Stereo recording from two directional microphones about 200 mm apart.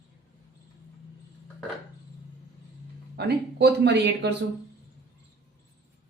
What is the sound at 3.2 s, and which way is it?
Speech, 60° right (ahead or behind).